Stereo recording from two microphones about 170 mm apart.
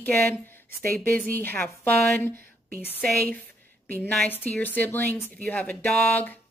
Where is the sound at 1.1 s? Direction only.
10° left (ahead or behind).